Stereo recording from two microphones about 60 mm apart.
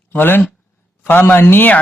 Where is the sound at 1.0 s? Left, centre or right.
Left.